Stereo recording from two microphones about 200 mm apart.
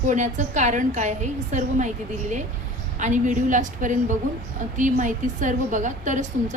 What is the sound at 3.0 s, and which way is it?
A woman's voice, 40° right (ahead or behind).